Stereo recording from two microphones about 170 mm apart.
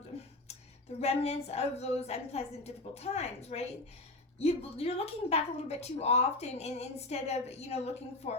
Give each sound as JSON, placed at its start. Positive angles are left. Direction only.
{"t": 1.0, "sound": "a woman's voice", "side_deg": 40}